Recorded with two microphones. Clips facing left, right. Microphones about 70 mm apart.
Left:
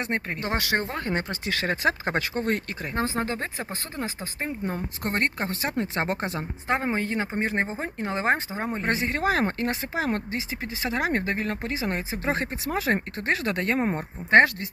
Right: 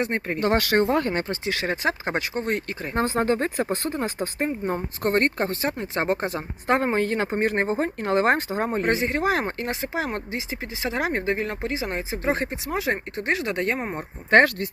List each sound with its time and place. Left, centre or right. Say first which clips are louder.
0.4 s speech: right 7 dB; right
0.9 s speech: right 9 dB; right
1.5 s speech: left 2 dB; right
3.0 s speech: right 6 dB; right
4.4 s speech: right 3 dB; right
5.0 s speech: right 5 dB; right
6.7 s speech: right 5 dB; right
8.9 s speech: even; right
13.7 s speech: left 4 dB; centre
14.3 s speech: right 1 dB; right